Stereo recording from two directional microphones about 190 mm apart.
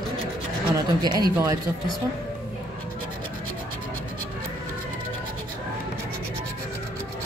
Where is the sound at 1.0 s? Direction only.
20° right (ahead or behind).